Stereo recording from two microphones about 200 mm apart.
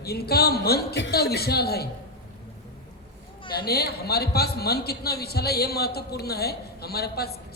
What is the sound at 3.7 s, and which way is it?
A man's voice, 50° left (ahead or behind).